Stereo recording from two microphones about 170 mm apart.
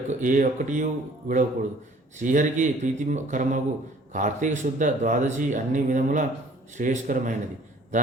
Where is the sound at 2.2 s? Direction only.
50° right (ahead or behind).